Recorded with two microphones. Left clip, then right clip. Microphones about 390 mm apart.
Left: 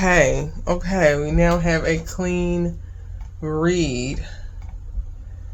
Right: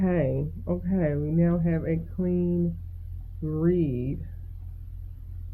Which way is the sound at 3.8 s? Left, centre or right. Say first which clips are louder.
Left 6 dB; left.